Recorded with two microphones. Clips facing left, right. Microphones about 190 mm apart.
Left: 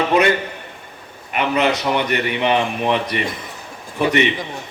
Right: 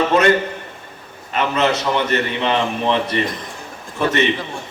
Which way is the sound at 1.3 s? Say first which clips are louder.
Even; 15° left (ahead or behind).